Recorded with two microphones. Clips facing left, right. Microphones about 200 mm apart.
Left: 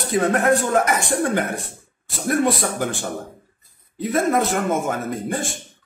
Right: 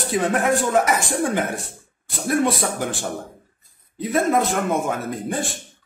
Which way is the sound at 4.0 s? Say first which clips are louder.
Even; centre (ahead or behind).